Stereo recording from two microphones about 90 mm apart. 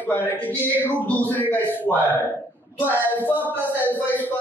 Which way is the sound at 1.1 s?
20° left (ahead or behind).